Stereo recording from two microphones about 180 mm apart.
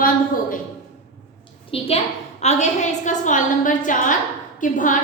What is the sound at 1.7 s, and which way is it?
A woman's voice, 30° left (ahead or behind).